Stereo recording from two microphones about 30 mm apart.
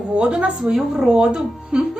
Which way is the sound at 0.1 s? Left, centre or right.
Right.